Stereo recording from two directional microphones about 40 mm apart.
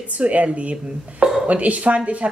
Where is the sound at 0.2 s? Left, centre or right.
Right.